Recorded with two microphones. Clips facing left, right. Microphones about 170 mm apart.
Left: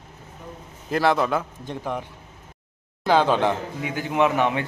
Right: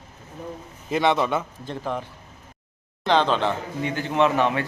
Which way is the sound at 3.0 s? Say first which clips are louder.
Left 2 dB; 10° left (ahead or behind).